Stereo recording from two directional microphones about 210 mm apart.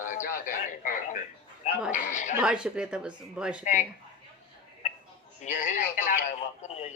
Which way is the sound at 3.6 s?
35° left (ahead or behind).